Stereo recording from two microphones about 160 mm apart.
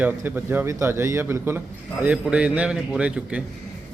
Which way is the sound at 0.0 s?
10° right (ahead or behind).